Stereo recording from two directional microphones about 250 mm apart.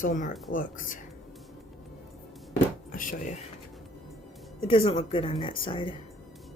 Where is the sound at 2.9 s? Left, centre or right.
Left.